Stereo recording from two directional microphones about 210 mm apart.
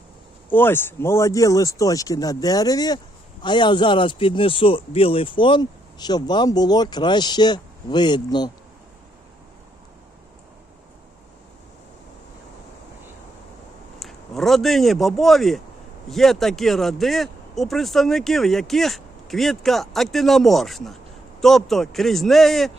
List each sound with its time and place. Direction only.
0.5 s speech: 10° left (ahead or behind)
14.0 s speech: centre (ahead or behind)